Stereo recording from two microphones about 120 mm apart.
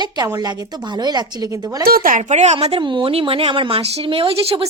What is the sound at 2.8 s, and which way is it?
A woman's voice, 45° right (ahead or behind).